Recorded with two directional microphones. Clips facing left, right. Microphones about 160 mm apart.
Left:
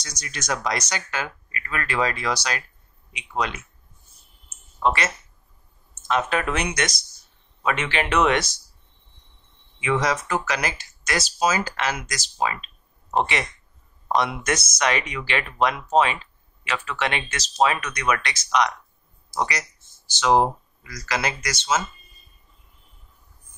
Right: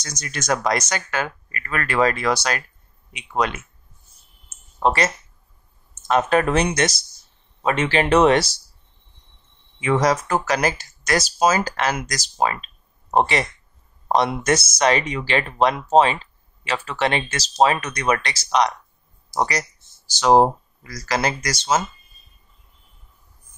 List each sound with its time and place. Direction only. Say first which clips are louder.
0.0 s speech: right 5 dB; 50° right (ahead or behind)
4.7 s speech: right 3 dB; 35° right (ahead or behind)
9.8 s speech: right 4 dB; 40° right (ahead or behind)